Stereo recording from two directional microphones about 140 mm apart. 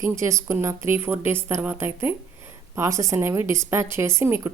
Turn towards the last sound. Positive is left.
turn(degrees=-20)  # may be behind; listen again after turning